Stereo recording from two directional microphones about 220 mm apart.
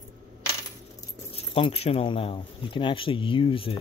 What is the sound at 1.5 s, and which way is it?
Speech, 25° left (ahead or behind).